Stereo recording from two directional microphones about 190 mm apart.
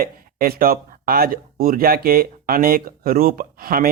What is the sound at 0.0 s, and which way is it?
Speech, 50° right (ahead or behind).